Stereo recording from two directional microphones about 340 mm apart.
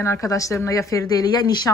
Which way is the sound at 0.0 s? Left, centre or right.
Centre.